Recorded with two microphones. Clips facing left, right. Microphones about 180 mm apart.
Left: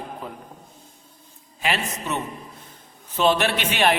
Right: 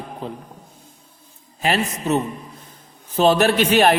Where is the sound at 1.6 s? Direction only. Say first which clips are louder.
Right 5 dB; 40° right (ahead or behind).